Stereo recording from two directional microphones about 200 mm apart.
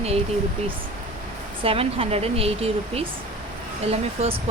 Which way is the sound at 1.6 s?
30° right (ahead or behind).